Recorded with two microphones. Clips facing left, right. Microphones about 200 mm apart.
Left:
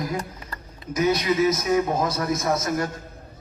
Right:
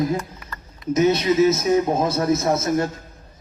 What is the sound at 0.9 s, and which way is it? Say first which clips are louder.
Speech: right 4 dB; 25° right (ahead or behind).